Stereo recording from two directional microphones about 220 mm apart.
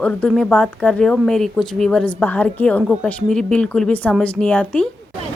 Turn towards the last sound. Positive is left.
turn(degrees=5)  # may be behind; listen again after turning